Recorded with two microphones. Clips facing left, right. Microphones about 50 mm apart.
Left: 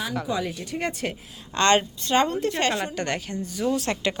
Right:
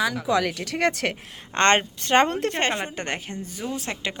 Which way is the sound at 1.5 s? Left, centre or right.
Right.